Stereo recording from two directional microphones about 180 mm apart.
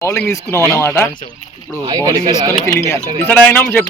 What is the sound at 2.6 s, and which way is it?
Speech, 15° left (ahead or behind).